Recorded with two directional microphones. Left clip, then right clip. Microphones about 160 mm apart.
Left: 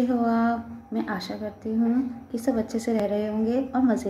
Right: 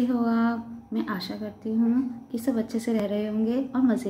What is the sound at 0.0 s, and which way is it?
A woman's voice, 25° right (ahead or behind).